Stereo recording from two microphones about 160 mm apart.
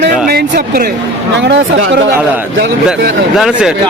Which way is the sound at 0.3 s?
75° right (ahead or behind).